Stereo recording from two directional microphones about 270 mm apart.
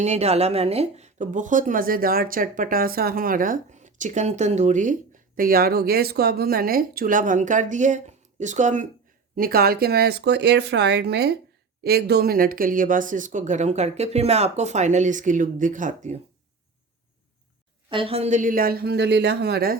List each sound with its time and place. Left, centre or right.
0.0 s a woman's voice: right
17.8 s a woman's voice: centre; by 19.8 s right